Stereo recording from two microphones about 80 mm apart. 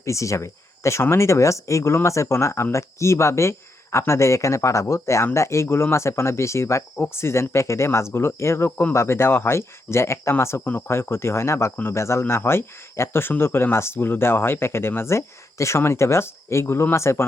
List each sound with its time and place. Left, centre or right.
0.0 s speech: left